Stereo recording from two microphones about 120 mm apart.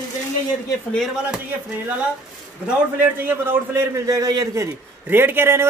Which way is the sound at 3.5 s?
25° right (ahead or behind).